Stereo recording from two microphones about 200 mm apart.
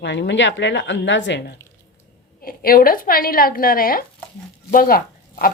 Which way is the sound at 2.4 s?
45° left (ahead or behind).